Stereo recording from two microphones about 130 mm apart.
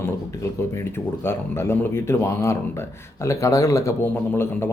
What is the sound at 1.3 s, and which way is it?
A man's voice, 20° left (ahead or behind).